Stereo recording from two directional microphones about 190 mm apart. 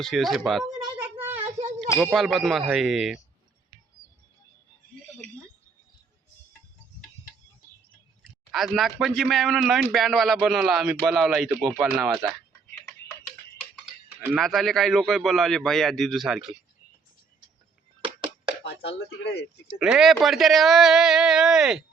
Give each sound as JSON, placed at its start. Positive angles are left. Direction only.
{"t": 0.0, "sound": "speech", "side_deg": 0}
{"t": 8.5, "sound": "speech", "side_deg": 0}
{"t": 14.2, "sound": "speech", "side_deg": -5}
{"t": 18.9, "sound": "speech", "side_deg": 65}
{"t": 19.6, "sound": "speech", "side_deg": 0}